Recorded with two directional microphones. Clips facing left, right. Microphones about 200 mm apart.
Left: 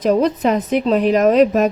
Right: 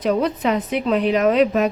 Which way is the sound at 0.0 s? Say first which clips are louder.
Left 4 dB; 45° left (ahead or behind).